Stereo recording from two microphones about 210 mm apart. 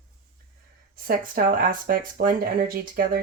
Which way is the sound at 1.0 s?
45° right (ahead or behind).